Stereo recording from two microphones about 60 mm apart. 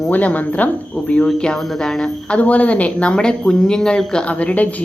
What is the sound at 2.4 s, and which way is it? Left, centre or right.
Speech, left.